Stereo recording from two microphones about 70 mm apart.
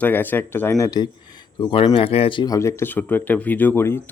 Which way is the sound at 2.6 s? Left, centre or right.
Left.